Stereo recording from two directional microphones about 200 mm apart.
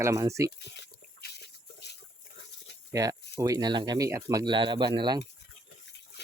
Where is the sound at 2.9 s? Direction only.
15° right (ahead or behind).